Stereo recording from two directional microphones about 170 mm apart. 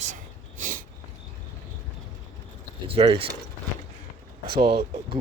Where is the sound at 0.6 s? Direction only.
50° right (ahead or behind).